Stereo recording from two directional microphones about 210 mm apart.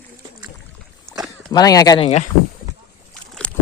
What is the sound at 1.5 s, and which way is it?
Speech, 15° left (ahead or behind).